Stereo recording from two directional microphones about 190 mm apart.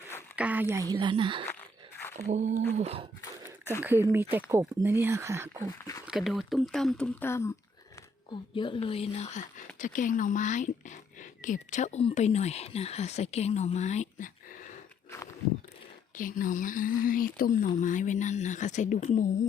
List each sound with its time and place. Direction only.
0.3 s speech: 10° right (ahead or behind); by 1.5 s 25° right (ahead or behind)
2.3 s speech: 40° right (ahead or behind)
3.8 s speech: 10° right (ahead or behind)
5.6 s speech: 20° left (ahead or behind)
6.1 s speech: centre (ahead or behind)
8.3 s speech: 25° left (ahead or behind)
16.1 s speech: 45° left (ahead or behind)